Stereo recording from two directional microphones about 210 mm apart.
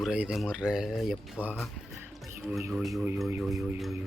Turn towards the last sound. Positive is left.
turn(degrees=-5)  # may be behind; listen again after turning